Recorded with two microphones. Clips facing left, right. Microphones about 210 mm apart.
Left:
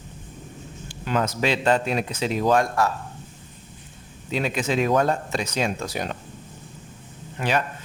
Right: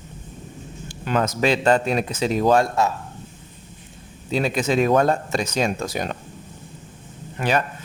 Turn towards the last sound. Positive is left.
turn(degrees=-50)  # may be behind; listen again after turning